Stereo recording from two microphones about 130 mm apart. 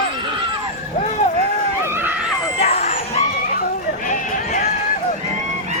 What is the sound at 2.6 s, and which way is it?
Vehicle, 50° left (ahead or behind).